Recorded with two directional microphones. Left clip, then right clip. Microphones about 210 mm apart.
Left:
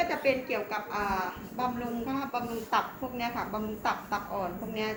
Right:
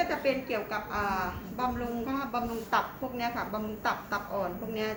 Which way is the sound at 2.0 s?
30° right (ahead or behind).